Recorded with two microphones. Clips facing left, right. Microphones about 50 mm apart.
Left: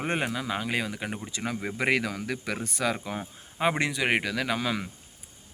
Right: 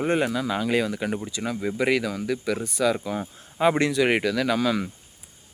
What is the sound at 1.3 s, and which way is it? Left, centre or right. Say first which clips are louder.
Speech: right 4 dB; left.